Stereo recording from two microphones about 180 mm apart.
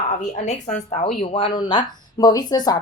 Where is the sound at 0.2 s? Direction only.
40° left (ahead or behind).